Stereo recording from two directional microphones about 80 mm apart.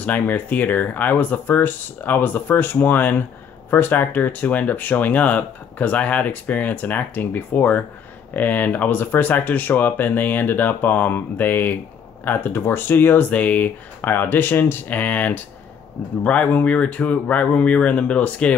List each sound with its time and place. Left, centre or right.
0.0 s speech: left